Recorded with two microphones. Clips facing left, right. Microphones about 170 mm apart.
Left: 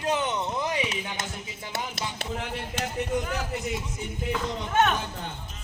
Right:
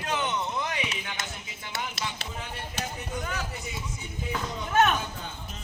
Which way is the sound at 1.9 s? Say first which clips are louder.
Left 3 dB; 65° left (ahead or behind).